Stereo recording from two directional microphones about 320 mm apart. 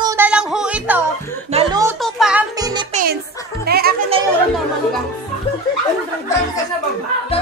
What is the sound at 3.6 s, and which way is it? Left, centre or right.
Music, right.